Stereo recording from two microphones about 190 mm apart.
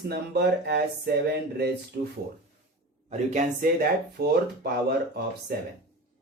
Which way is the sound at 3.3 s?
45° right (ahead or behind).